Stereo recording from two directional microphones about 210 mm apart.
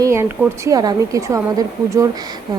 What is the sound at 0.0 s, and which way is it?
Speech, 10° right (ahead or behind).